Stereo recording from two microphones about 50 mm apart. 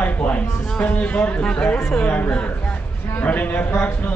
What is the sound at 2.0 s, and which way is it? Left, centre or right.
A man's voice, left.